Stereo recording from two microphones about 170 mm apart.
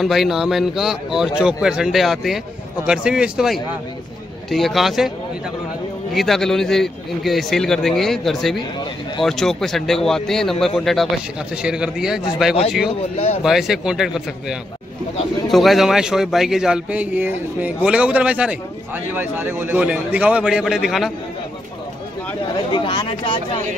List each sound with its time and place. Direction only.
0.0 s a man's voice: centre (ahead or behind)
6.1 s a man's voice: centre (ahead or behind)
22.7 s speech: 25° left (ahead or behind)